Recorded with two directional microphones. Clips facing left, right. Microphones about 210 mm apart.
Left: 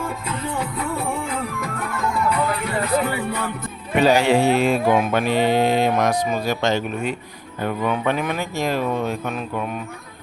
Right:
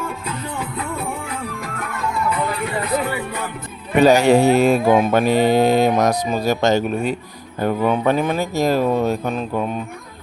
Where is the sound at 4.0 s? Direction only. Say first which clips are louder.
Right 4 dB; 45° right (ahead or behind).